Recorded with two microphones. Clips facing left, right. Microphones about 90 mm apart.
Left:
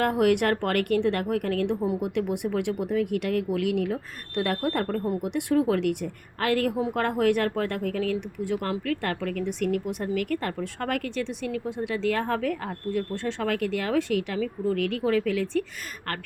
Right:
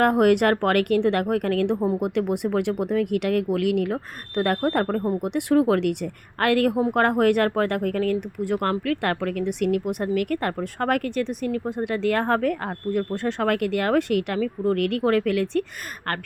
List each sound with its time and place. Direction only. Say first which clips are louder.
0.0 s a woman's voice: right 4 dB; 50° right (ahead or behind)